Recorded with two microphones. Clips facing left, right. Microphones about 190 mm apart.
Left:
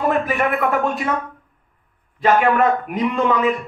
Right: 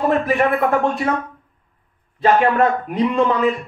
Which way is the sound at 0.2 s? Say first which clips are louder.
Right 3 dB; 30° right (ahead or behind).